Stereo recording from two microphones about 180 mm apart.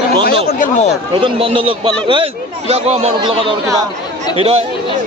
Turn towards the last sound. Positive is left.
turn(degrees=-35)  # may be behind; listen again after turning